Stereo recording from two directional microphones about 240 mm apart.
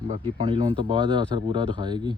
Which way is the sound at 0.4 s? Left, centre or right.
Centre.